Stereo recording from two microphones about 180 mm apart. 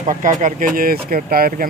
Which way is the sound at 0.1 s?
45° right (ahead or behind).